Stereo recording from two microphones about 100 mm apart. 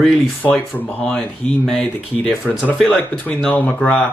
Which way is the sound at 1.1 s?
5° left (ahead or behind).